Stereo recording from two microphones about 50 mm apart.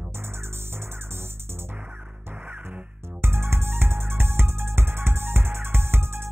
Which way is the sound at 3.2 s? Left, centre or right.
Right.